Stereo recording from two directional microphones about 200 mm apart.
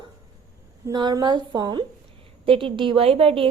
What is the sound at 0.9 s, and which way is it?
A woman's voice, 20° right (ahead or behind).